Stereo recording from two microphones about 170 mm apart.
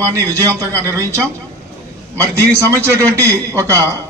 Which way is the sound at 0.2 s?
15° right (ahead or behind).